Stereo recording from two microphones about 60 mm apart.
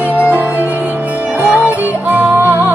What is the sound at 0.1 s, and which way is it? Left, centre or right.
Music, left.